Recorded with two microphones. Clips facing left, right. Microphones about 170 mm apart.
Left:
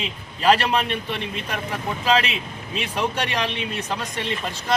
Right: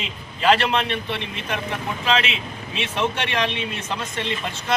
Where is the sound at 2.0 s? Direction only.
40° left (ahead or behind).